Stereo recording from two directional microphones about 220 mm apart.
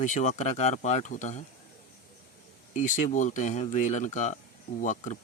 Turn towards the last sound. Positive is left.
turn(degrees=35)  # may be behind; listen again after turning